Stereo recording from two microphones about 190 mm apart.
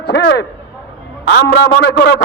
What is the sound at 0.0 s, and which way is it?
Speech, 60° left (ahead or behind).